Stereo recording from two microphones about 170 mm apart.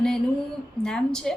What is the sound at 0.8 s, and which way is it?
Speech, 5° left (ahead or behind).